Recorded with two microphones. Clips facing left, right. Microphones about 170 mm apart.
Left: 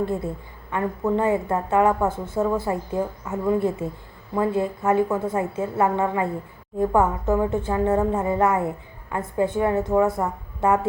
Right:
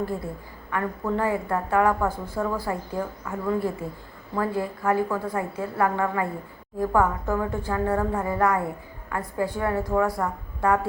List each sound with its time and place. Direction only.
0.7 s a woman's voice: 20° left (ahead or behind)